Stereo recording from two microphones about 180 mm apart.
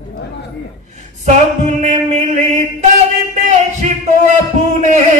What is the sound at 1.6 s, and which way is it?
Chant, 40° right (ahead or behind).